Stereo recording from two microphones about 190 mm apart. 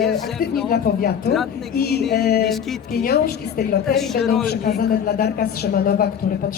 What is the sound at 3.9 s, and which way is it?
Speech, centre (ahead or behind).